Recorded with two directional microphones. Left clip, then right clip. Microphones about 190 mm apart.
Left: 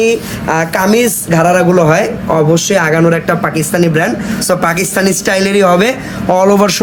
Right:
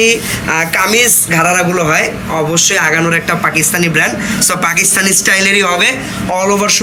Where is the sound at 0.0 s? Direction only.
40° left (ahead or behind).